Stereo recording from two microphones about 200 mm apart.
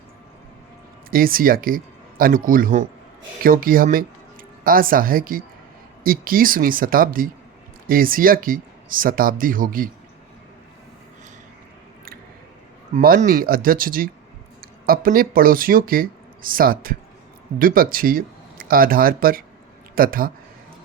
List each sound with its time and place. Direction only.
1.1 s speech: 45° right (ahead or behind)
12.9 s speech: 40° right (ahead or behind)